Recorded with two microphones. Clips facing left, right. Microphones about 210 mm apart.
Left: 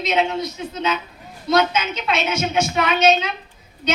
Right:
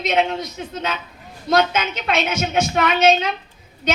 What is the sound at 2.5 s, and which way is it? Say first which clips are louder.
Speech: right 2 dB; 50° right (ahead or behind).